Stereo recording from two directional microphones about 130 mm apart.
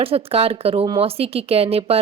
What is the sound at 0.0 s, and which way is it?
A woman's voice, 50° right (ahead or behind).